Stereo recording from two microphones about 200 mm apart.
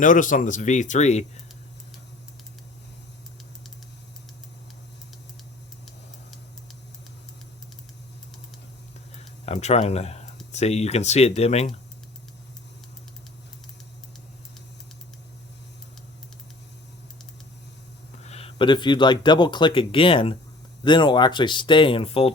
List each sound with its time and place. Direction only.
0.0 s speech: 40° left (ahead or behind)
9.1 s a sound: 35° left (ahead or behind)
10.5 s speech: 35° left (ahead or behind)
18.2 s speech: 30° left (ahead or behind)